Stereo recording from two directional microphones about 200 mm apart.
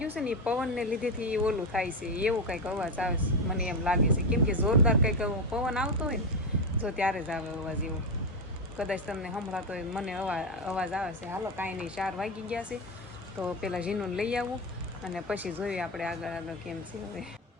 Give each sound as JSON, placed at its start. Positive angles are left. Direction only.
{"t": 0.2, "sound": "speech", "side_deg": -5}
{"t": 8.8, "sound": "speech", "side_deg": -5}